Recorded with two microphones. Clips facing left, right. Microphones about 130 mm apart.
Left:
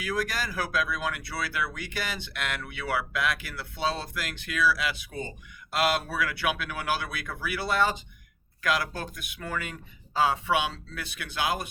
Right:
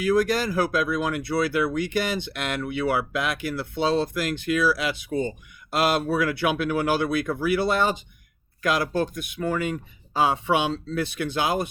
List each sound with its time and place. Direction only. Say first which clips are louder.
0.0 s speech: right 9 dB; 25° right (ahead or behind)